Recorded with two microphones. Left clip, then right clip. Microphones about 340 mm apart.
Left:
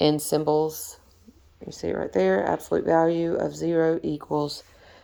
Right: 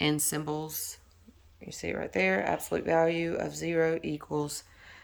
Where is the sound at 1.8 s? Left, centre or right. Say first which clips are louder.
Left 6 dB; left.